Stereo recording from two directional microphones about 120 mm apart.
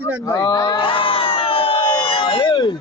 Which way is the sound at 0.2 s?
30° left (ahead or behind).